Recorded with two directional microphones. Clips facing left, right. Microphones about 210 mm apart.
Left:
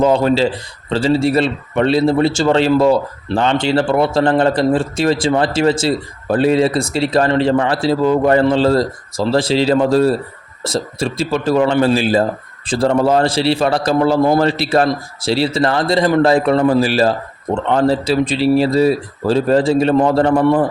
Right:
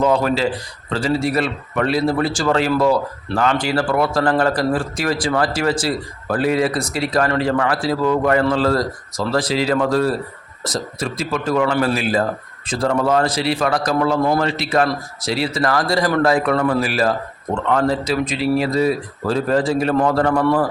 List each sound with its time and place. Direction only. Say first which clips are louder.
0.0 s a man's voice: left 4 dB; 25° left (ahead or behind)